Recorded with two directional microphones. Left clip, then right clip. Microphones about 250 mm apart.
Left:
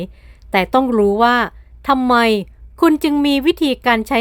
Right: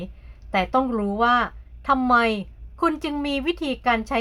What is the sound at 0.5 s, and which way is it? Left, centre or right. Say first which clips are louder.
A woman's voice: left 7 dB; left.